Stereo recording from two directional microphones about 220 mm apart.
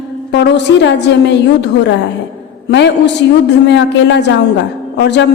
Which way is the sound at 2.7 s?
50° left (ahead or behind).